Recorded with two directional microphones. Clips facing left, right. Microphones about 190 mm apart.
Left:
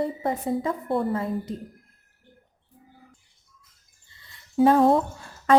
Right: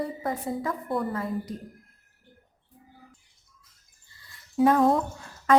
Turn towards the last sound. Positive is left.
turn(degrees=30)  # may be behind; listen again after turning